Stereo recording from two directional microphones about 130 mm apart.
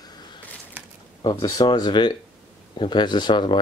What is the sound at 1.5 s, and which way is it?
Speech, 30° left (ahead or behind).